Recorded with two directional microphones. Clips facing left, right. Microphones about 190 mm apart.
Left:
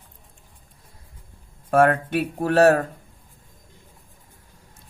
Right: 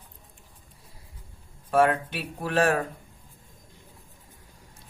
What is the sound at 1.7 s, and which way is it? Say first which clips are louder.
Speech: left 4 dB; 50° left (ahead or behind).